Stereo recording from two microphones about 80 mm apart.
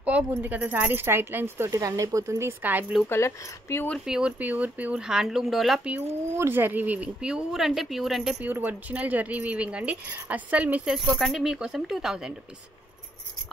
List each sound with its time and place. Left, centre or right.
0.0 s speech: centre
1.7 s speech: right
2.6 s speech: right
3.0 s speech: left
4.0 s speech: centre
4.4 s speech: centre
6.3 s speech: right; by 8.4 s centre
8.4 s speech: right
10.9 s speech: centre